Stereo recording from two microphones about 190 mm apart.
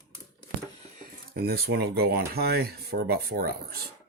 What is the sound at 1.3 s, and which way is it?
Speech, 55° right (ahead or behind).